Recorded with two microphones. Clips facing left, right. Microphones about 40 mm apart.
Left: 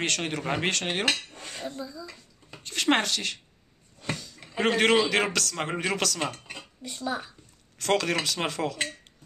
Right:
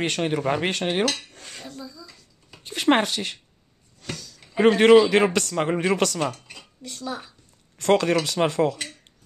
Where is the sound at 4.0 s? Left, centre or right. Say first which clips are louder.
Left 2 dB; left.